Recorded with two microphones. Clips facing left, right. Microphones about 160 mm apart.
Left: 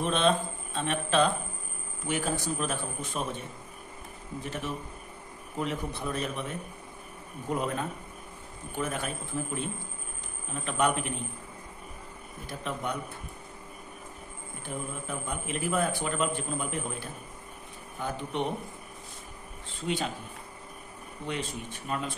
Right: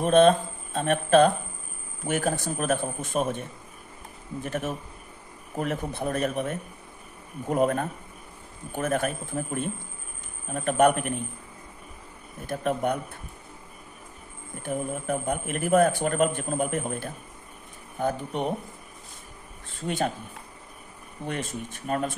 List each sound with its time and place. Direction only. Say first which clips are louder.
0.0 s speech: right 8 dB; 45° right (ahead or behind)
4.4 s speech: right 5 dB; 50° right (ahead or behind)
12.4 s speech: right 8 dB; 50° right (ahead or behind)
14.6 s speech: right 7 dB; 55° right (ahead or behind)
21.3 s speech: right 2 dB; 45° right (ahead or behind)